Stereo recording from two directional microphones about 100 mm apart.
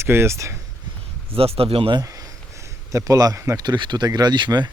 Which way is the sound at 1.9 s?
40° right (ahead or behind).